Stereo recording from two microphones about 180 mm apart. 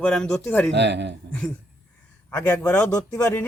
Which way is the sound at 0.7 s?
70° right (ahead or behind).